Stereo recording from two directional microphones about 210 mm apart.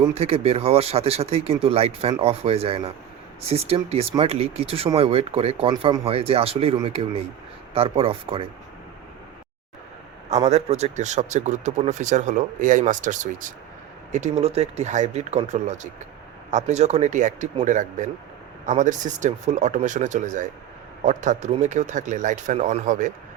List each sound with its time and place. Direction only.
0.1 s speech: 30° right (ahead or behind)
10.4 s speech: 30° right (ahead or behind)